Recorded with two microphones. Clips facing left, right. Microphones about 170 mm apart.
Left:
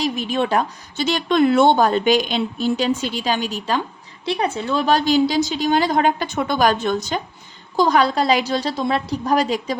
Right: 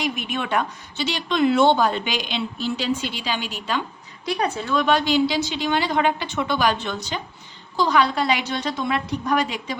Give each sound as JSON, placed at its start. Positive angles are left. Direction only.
{"t": 0.0, "sound": "speech", "side_deg": 35}
{"t": 4.3, "sound": "a woman's voice", "side_deg": 25}